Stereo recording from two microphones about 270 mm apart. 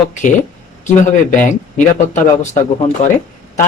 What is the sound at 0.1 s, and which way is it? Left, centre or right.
Speech, left.